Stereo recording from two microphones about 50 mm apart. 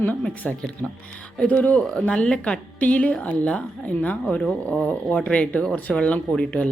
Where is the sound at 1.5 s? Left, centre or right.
Left.